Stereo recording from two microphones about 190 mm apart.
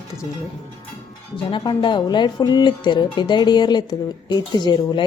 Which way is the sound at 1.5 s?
25° left (ahead or behind).